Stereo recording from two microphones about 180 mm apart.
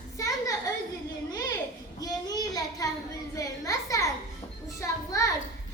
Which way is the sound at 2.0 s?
20° left (ahead or behind).